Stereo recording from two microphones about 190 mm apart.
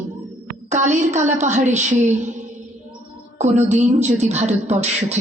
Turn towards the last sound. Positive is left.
turn(degrees=-35)  # may be behind; listen again after turning